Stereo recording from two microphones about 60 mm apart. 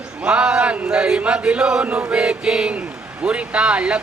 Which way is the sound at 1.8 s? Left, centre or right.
Right.